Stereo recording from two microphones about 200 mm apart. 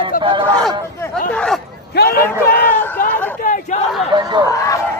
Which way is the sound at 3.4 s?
40° left (ahead or behind).